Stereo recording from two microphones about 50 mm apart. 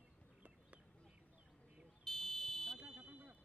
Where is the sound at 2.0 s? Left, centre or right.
Centre.